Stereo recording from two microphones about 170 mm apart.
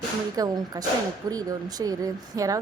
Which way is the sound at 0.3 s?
20° right (ahead or behind).